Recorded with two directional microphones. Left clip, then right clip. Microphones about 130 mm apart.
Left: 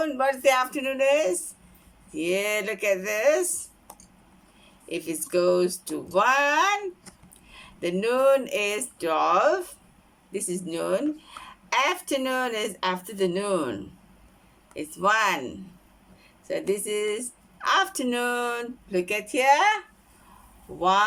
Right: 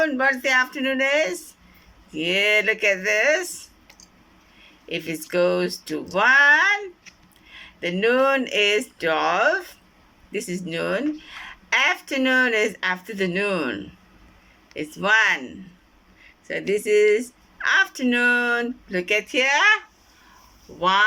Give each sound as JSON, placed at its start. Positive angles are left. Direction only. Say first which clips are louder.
{"t": 0.4, "sound": "speech", "louder": "right 2 dB", "side_deg": 25}
{"t": 4.9, "sound": "speech", "louder": "right 2 dB", "side_deg": 25}
{"t": 10.7, "sound": "speech", "louder": "right 2 dB", "side_deg": 25}
{"t": 14.8, "sound": "speech", "louder": "right 4 dB", "side_deg": 20}
{"t": 16.5, "sound": "speech", "louder": "right 6 dB", "side_deg": 25}